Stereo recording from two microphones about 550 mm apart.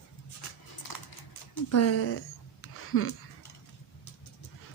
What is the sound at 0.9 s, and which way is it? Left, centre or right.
Typing, left.